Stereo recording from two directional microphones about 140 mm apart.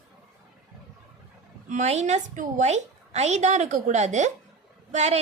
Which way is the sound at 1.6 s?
55° right (ahead or behind).